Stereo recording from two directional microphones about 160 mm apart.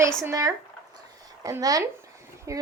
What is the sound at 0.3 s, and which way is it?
Speech, 20° right (ahead or behind).